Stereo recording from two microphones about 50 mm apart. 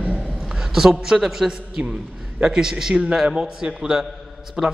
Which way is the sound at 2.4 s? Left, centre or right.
Centre.